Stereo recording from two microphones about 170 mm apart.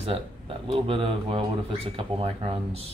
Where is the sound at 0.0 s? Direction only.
35° right (ahead or behind).